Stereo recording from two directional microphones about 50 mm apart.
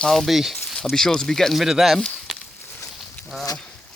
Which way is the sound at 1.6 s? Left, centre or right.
Centre.